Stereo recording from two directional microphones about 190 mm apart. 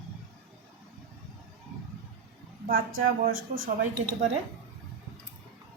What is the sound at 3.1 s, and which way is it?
Speech, 50° right (ahead or behind).